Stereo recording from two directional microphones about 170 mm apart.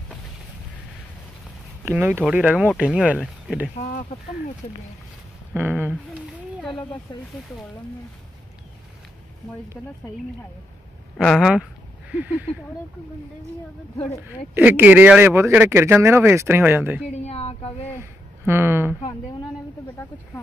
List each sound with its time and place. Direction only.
1.9 s speech: 10° right (ahead or behind)
5.5 s speech: 10° right (ahead or behind)
6.7 s speech: 25° left (ahead or behind)
9.8 s speech: 5° left (ahead or behind)
11.1 s speech: centre (ahead or behind)
14.2 s speech: 10° right (ahead or behind)
17.1 s speech: 40° left (ahead or behind)
18.4 s speech: 15° right (ahead or behind)